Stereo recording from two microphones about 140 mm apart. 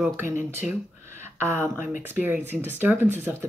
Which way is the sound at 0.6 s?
5° right (ahead or behind).